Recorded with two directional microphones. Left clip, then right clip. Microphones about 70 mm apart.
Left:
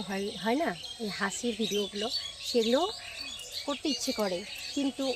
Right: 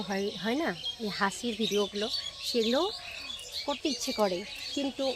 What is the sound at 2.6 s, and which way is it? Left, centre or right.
Speech, right.